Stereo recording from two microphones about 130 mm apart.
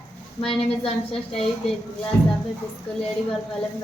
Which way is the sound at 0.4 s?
45° left (ahead or behind).